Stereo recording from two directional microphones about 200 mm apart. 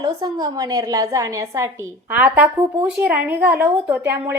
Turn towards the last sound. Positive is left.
turn(degrees=-10)  # may be behind; listen again after turning